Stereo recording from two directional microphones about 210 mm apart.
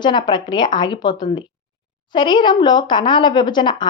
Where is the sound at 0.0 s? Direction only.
20° left (ahead or behind).